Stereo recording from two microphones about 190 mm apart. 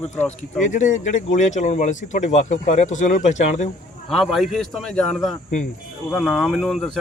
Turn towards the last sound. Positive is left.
turn(degrees=0)  # may be behind; listen again after turning